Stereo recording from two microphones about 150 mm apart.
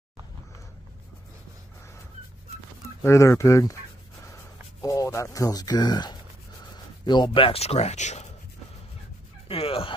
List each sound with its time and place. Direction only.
3.0 s speech: 20° left (ahead or behind)
4.8 s speech: 20° left (ahead or behind); by 8.3 s 50° left (ahead or behind)
9.5 s speech: 40° left (ahead or behind)